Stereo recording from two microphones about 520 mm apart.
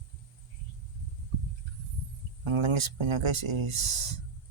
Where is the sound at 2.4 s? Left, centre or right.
Right.